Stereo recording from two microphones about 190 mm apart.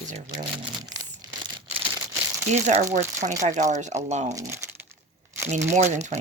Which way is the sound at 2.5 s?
35° right (ahead or behind).